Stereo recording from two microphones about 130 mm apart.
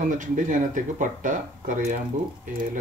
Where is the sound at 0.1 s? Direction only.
80° right.